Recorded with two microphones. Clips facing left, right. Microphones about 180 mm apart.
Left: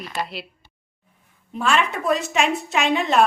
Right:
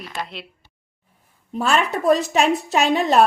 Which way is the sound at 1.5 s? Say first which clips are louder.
Right 1 dB; 40° right (ahead or behind).